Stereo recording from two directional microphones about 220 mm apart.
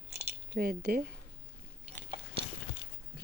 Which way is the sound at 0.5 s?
45° right (ahead or behind).